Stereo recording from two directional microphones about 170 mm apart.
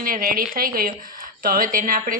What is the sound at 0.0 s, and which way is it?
A woman's voice, 60° right (ahead or behind).